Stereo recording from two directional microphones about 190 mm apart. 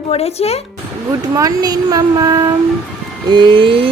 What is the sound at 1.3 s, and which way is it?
Speech, 20° right (ahead or behind).